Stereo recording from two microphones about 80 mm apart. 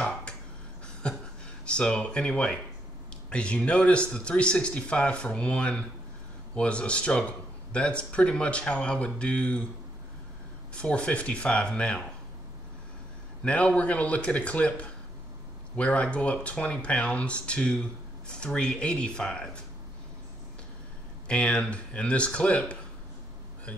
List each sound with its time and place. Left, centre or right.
1.0 s a sound: centre
1.7 s a man's voice: centre
10.7 s a man's voice: centre
13.4 s a man's voice: centre
21.3 s a man's voice: centre